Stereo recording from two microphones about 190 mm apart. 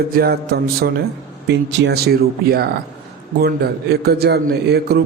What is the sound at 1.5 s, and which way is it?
A man's voice, 65° right (ahead or behind).